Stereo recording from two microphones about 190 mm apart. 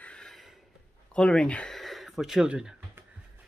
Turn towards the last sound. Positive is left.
turn(degrees=-5)  # may be behind; listen again after turning